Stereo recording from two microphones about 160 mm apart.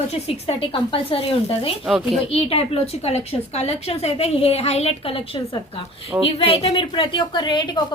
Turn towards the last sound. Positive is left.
turn(degrees=30)  # may be behind; listen again after turning